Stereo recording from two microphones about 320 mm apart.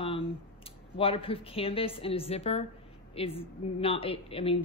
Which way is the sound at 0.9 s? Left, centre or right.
Centre.